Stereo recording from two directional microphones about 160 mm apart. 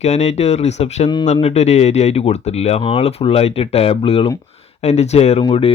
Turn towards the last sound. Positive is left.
turn(degrees=35)  # may be behind; listen again after turning